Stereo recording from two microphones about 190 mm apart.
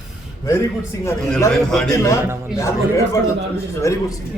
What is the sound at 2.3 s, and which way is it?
Speech, 5° right (ahead or behind).